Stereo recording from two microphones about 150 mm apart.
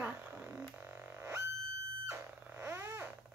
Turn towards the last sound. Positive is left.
turn(degrees=-15)  # may be behind; listen again after turning